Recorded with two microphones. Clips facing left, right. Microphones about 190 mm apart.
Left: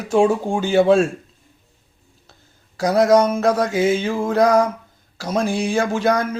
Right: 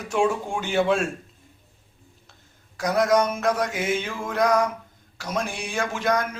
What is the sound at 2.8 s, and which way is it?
A man's voice, 35° left (ahead or behind).